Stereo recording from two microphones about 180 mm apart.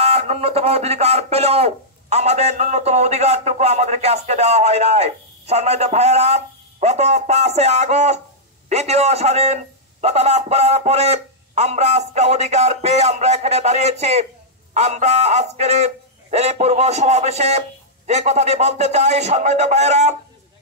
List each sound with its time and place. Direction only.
0.0 s speech: 35° right (ahead or behind)